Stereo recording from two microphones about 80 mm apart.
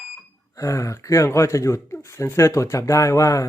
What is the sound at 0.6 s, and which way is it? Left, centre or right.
A man's voice, left.